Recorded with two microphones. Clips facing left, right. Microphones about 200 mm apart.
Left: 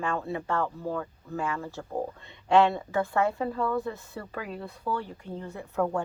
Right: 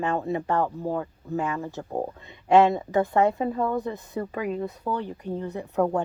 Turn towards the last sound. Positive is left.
turn(degrees=-20)  # may be behind; listen again after turning